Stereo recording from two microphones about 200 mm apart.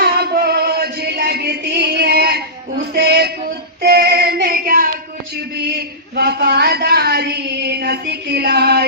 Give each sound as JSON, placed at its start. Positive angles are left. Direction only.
{"t": 0.0, "sound": "music", "side_deg": -50}
{"t": 3.8, "sound": "child singing", "side_deg": -50}
{"t": 6.1, "sound": "a sound", "side_deg": -50}